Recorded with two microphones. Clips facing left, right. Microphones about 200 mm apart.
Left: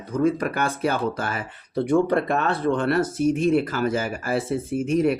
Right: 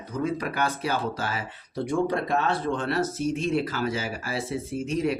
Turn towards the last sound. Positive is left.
turn(degrees=50)  # may be behind; listen again after turning